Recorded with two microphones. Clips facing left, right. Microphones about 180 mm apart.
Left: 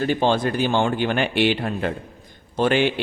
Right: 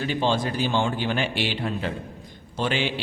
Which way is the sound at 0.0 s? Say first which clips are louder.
Left 4 dB; 50° left (ahead or behind).